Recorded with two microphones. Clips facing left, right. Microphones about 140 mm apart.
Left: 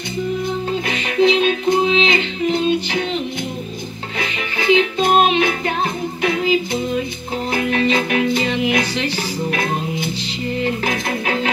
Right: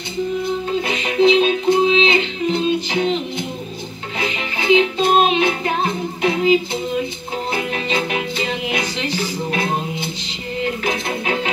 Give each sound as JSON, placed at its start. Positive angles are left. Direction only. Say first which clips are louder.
{"t": 0.8, "sound": "music", "louder": "right 1 dB", "side_deg": -30}
{"t": 4.2, "sound": "music", "louder": "even", "side_deg": -30}